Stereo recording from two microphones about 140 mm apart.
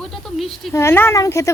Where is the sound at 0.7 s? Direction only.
20° left (ahead or behind).